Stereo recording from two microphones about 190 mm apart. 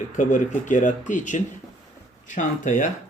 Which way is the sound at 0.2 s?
40° left (ahead or behind).